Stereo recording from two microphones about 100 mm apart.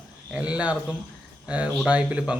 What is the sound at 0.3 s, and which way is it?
A man's voice, 10° right (ahead or behind).